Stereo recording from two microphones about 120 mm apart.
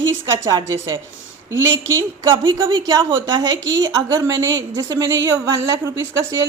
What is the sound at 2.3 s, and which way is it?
A woman's voice, 35° right (ahead or behind).